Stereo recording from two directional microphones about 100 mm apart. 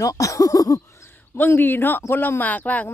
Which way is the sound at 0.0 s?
35° left (ahead or behind).